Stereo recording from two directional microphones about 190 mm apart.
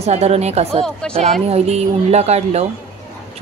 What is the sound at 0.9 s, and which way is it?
Speech, 5° left (ahead or behind).